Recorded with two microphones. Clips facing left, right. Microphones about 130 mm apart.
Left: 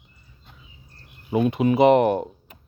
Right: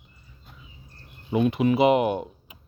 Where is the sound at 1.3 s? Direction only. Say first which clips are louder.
Left 1 dB; 35° left (ahead or behind).